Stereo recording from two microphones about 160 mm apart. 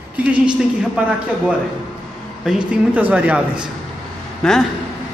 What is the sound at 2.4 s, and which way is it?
A man's voice, 5° right (ahead or behind).